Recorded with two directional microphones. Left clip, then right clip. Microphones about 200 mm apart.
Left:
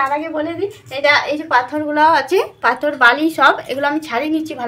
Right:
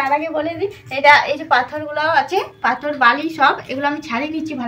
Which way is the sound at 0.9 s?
15° left (ahead or behind).